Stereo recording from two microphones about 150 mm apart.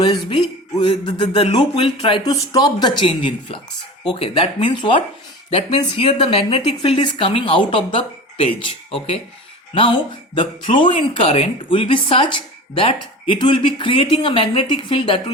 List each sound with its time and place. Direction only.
0.0 s speech: 35° left (ahead or behind)